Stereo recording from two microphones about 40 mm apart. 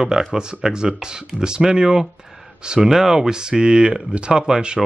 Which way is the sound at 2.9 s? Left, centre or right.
Centre.